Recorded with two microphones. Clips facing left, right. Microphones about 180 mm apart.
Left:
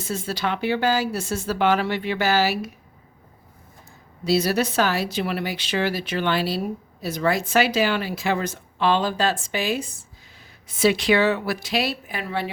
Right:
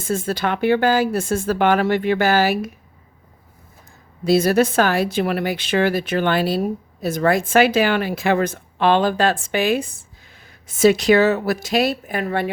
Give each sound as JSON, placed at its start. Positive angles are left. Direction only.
{"t": 0.0, "sound": "speech", "side_deg": -50}
{"t": 4.2, "sound": "speech", "side_deg": -50}